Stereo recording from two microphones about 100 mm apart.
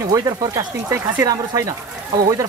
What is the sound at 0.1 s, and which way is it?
Speech, 35° right (ahead or behind).